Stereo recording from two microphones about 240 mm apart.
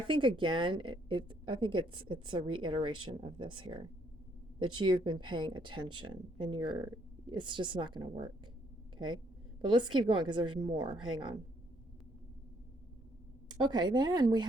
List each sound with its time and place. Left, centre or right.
0.1 s speech: centre
13.5 s speech: centre